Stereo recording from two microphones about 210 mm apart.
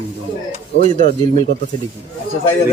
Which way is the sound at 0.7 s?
35° right (ahead or behind).